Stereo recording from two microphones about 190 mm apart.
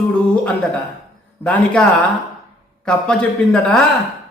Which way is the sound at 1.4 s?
5° left (ahead or behind).